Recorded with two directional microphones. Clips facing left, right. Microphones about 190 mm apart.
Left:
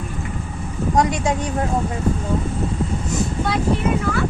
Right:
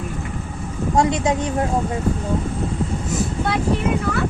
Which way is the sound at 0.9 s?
20° right (ahead or behind).